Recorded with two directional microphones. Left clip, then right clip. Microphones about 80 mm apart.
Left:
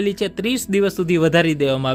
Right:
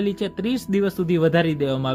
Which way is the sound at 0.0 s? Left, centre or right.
Left.